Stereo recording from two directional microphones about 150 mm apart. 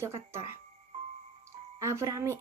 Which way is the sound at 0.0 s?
20° right (ahead or behind).